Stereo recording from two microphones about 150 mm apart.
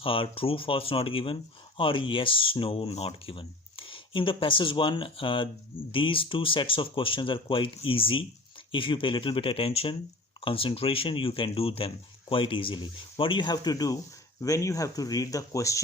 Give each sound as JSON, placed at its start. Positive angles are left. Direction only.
{"t": 0.0, "sound": "speech", "side_deg": 35}